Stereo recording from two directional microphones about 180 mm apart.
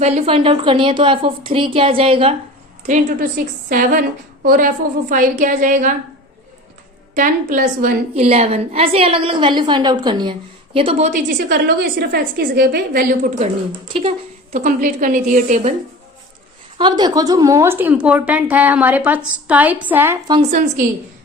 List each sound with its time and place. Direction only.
0.0 s a woman's voice: 30° right (ahead or behind)
3.2 s a woman's voice: 50° right (ahead or behind)
7.2 s a woman's voice: 45° right (ahead or behind)
8.1 s a woman's voice: 35° right (ahead or behind)
10.8 s a woman's voice: 35° right (ahead or behind); by 13.3 s 50° right (ahead or behind)
13.4 s speech: 30° right (ahead or behind)
14.5 s a woman's voice: 45° right (ahead or behind)
16.7 s a woman's voice: 25° right (ahead or behind)